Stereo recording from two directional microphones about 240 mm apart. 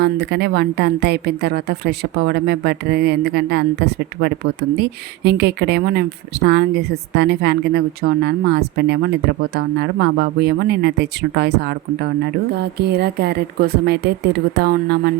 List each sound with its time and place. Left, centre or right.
0.0 s a woman's voice: right